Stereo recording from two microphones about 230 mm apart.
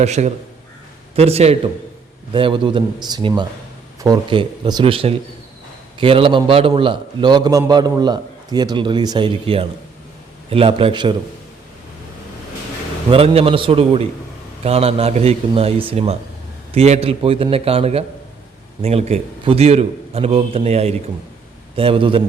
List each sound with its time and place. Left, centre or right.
0.0 s a man's voice: right
13.1 s a man's voice: right